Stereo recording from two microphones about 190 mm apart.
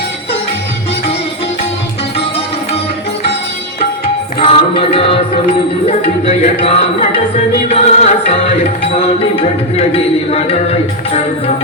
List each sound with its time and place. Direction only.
4.4 s music: 30° left (ahead or behind)
5.8 s speech: 35° left (ahead or behind)